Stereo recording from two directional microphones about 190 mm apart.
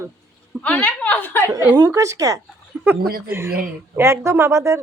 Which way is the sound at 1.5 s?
15° right (ahead or behind).